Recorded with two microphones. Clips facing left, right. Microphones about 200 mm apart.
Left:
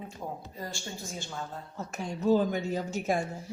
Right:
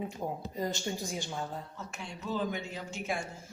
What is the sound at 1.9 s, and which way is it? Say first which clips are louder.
A woman's voice: left 10 dB; 45° left (ahead or behind).